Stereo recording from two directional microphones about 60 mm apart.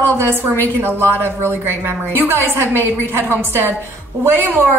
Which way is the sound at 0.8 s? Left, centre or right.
Right.